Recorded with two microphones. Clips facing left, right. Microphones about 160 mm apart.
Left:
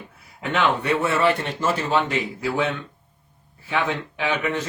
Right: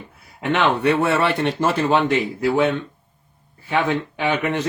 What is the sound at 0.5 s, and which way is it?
Speech, 65° right (ahead or behind).